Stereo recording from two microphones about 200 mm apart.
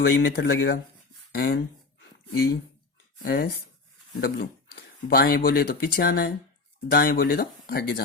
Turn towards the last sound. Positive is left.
turn(degrees=50)  # may be behind; listen again after turning